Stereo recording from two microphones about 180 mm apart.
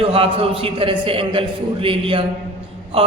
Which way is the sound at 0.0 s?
30° right (ahead or behind).